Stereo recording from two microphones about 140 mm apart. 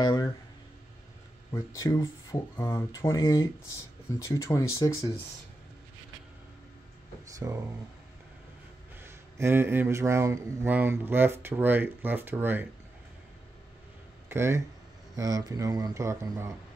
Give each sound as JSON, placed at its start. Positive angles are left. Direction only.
{"t": 0.0, "sound": "a sound", "side_deg": 30}
{"t": 1.5, "sound": "speech", "side_deg": 25}
{"t": 2.8, "sound": "speech", "side_deg": 20}
{"t": 7.4, "sound": "speech", "side_deg": -20}
{"t": 9.0, "sound": "mantra", "side_deg": -15}
{"t": 14.3, "sound": "speech", "side_deg": -20}